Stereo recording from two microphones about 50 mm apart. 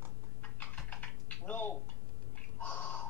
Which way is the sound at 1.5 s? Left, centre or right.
Left.